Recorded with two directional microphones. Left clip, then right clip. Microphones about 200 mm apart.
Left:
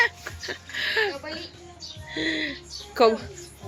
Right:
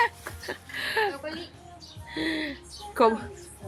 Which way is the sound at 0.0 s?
20° right (ahead or behind).